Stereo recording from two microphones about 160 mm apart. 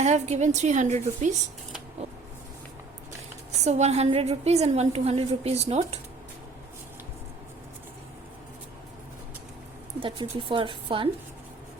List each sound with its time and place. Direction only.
0.0 s a woman's voice: 45° right (ahead or behind)
3.6 s a woman's voice: 45° right (ahead or behind)
10.0 s a woman's voice: 30° right (ahead or behind)